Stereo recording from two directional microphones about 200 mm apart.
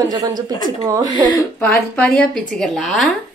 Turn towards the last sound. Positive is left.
turn(degrees=0)  # may be behind; listen again after turning